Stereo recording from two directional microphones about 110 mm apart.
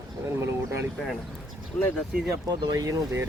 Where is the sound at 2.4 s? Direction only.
35° right (ahead or behind).